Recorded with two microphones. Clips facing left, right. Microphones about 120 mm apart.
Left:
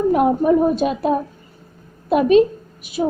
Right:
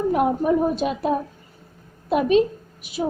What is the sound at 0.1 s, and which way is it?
A woman's voice, 70° left (ahead or behind).